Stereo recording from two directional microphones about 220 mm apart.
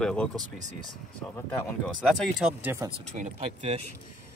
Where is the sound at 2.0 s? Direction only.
Centre (ahead or behind).